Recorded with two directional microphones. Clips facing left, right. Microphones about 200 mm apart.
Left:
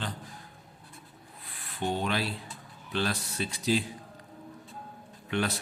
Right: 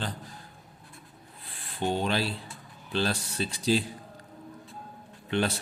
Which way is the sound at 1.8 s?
30° right (ahead or behind).